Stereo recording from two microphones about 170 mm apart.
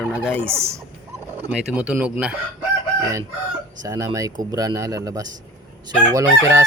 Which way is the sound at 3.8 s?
20° right (ahead or behind).